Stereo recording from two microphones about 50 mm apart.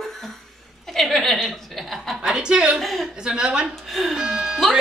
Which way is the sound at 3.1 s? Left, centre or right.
Centre.